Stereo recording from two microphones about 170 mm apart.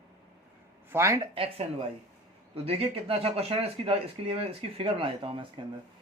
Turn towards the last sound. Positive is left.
turn(degrees=-30)  # may be behind; listen again after turning